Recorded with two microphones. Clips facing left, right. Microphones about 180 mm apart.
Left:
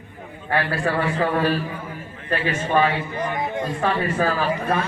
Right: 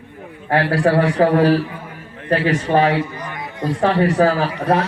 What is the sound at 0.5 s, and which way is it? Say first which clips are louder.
A man's voice: right 7 dB; 90° right.